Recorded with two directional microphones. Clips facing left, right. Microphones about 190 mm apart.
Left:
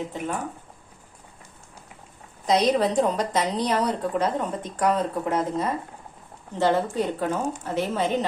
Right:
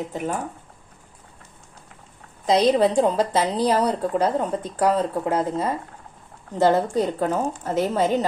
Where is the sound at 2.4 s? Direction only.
30° right (ahead or behind).